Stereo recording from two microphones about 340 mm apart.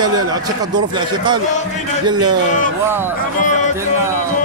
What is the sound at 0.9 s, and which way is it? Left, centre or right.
Speech, centre.